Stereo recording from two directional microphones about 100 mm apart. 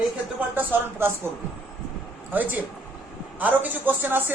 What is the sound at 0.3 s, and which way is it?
Speech, 20° right (ahead or behind).